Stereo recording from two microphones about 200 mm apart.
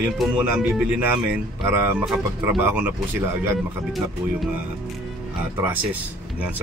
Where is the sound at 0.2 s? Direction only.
5° right (ahead or behind).